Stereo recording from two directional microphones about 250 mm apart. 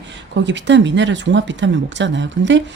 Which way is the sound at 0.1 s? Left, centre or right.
Right.